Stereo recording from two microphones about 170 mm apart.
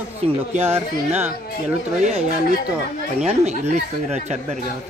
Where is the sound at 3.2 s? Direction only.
40° right (ahead or behind).